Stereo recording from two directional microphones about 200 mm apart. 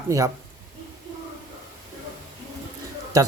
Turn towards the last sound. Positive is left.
turn(degrees=-15)  # may be behind; listen again after turning